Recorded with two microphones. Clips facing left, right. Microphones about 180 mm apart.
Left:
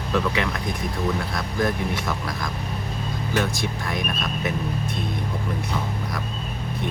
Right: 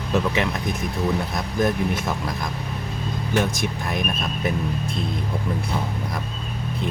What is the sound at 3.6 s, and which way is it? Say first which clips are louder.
Speech: right 1 dB; 20° right (ahead or behind).